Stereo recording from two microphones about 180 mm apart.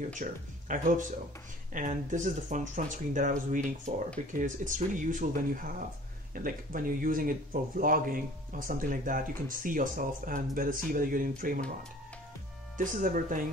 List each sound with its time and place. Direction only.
0.2 s speech: 45° right (ahead or behind)
12.7 s speech: 45° right (ahead or behind)